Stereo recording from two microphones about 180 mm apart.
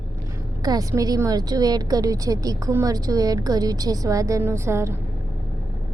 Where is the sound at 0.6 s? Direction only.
20° right (ahead or behind).